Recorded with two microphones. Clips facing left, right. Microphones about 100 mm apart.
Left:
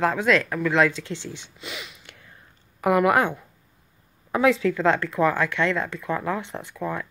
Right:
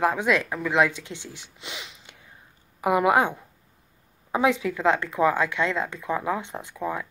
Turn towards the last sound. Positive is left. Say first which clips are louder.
# even
turn(degrees=-15)  # may be behind; listen again after turning